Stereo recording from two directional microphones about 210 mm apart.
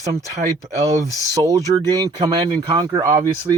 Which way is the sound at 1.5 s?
15° right (ahead or behind).